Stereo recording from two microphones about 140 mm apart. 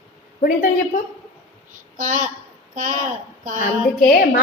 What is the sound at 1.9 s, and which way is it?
A woman's voice, 60° right (ahead or behind).